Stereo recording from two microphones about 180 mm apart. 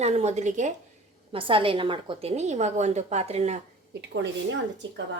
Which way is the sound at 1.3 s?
30° right (ahead or behind).